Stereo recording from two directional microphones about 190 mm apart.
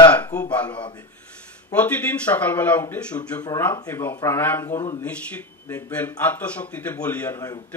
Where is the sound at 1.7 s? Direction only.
10° left (ahead or behind).